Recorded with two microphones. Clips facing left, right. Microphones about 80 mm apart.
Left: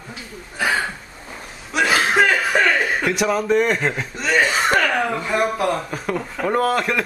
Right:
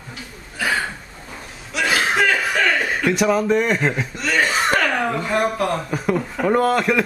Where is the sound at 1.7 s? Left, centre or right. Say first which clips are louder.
Left 2 dB; left.